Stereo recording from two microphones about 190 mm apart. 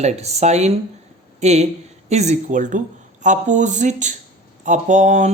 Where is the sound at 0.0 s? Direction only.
35° right (ahead or behind).